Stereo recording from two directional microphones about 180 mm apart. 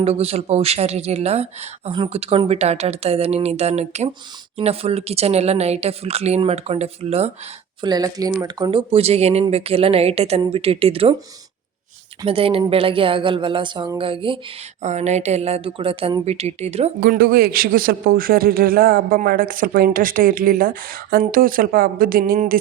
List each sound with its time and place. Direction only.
0.0 s a woman's voice: 35° right (ahead or behind)
7.8 s a woman's voice: 20° right (ahead or behind)
12.2 s speech: 30° right (ahead or behind)
14.8 s a woman's voice: 40° right (ahead or behind)
17.0 s a man's voice: 55° right (ahead or behind)